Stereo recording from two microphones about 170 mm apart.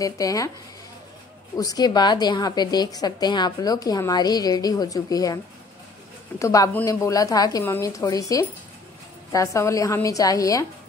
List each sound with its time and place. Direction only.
0.0 s a woman's voice: 20° left (ahead or behind)
1.6 s a woman's voice: 20° left (ahead or behind)
6.4 s a woman's voice: 20° left (ahead or behind)